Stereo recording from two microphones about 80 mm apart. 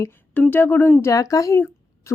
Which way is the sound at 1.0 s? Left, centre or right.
Left.